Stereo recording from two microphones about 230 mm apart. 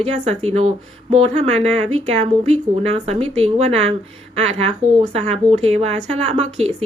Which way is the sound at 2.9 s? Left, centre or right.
Right.